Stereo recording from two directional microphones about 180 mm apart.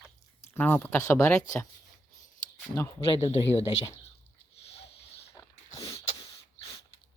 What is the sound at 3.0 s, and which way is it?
Speech, 30° left (ahead or behind).